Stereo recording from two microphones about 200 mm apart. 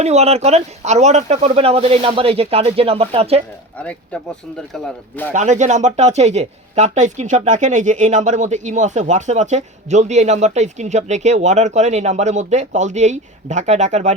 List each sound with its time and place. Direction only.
0.0 s speech: 35° right (ahead or behind)
3.8 s speech: 5° left (ahead or behind)
5.3 s speech: 35° right (ahead or behind)